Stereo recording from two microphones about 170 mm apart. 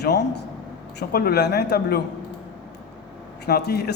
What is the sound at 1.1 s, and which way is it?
Speech, 70° left (ahead or behind).